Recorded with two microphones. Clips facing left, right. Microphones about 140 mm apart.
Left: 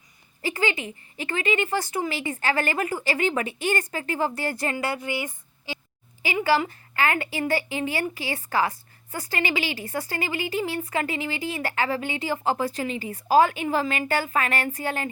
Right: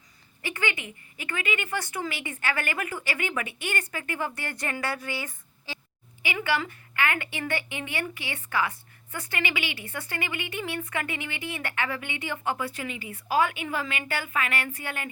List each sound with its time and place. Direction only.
0.4 s a woman's voice: 35° left (ahead or behind)
6.2 s speech: 40° left (ahead or behind)